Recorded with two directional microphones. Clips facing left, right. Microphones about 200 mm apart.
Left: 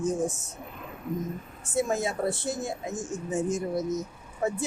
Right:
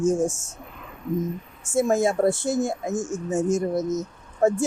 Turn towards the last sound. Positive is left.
turn(degrees=-45)  # may be behind; listen again after turning